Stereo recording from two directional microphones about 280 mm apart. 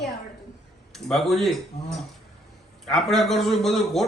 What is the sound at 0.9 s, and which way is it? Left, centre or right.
Speech, centre.